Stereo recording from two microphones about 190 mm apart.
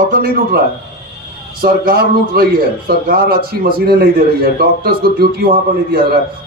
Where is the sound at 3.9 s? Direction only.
55° right (ahead or behind).